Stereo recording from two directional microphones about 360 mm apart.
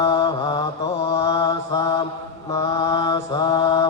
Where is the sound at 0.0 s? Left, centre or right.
Centre.